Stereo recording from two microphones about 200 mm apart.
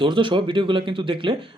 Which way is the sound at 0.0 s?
25° right (ahead or behind).